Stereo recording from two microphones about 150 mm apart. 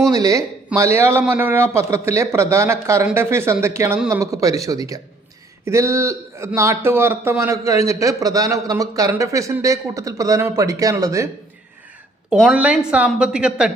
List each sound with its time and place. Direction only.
0.0 s speech: 25° right (ahead or behind)
12.3 s speech: 5° right (ahead or behind)